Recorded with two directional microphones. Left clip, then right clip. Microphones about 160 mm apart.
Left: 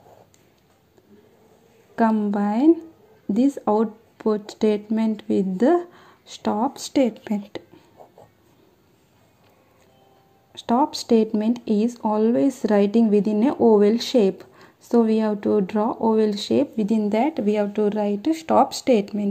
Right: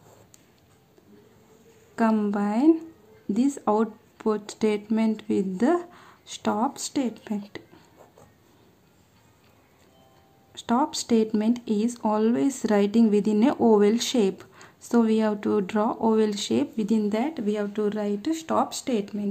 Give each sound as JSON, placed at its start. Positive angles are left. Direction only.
{"t": 2.1, "sound": "speech", "side_deg": 5}
{"t": 2.4, "sound": "speech", "side_deg": 20}
{"t": 7.4, "sound": "a sound", "side_deg": 15}
{"t": 10.5, "sound": "speech", "side_deg": 15}
{"t": 17.2, "sound": "speech", "side_deg": 25}